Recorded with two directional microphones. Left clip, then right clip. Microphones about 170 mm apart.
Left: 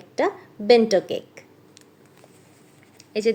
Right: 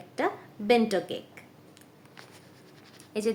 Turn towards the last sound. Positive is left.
turn(degrees=15)  # may be behind; listen again after turning